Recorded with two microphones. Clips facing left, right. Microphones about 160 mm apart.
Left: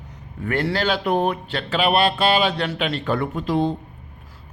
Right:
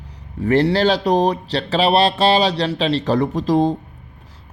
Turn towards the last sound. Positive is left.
turn(degrees=-40)  # may be behind; listen again after turning